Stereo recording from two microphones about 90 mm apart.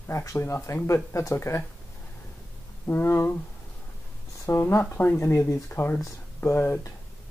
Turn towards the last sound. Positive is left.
turn(degrees=30)  # may be behind; listen again after turning